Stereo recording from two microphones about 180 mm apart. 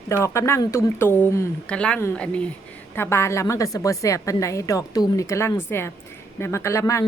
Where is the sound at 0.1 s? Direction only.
15° left (ahead or behind).